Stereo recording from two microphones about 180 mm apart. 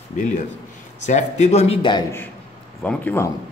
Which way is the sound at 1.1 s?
40° left (ahead or behind).